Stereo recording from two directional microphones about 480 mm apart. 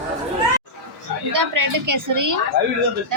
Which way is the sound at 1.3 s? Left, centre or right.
Right.